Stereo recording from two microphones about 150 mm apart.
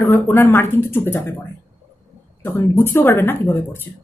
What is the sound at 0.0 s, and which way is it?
Speech, 15° left (ahead or behind).